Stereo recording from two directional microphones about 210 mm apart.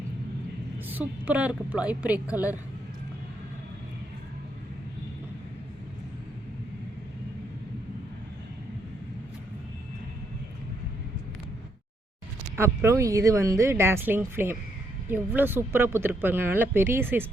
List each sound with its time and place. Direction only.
0.9 s speech: 10° right (ahead or behind)
12.5 s speech: 10° right (ahead or behind)